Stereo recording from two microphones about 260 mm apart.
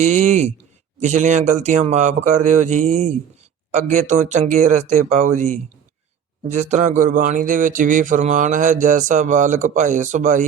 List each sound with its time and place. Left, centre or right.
0.0 s speech: right